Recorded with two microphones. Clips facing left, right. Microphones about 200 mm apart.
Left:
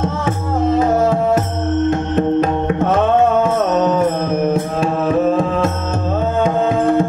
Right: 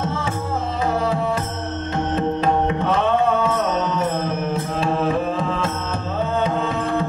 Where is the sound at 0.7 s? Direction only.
45° left (ahead or behind).